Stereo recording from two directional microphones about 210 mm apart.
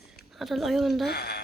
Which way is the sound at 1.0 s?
50° left (ahead or behind).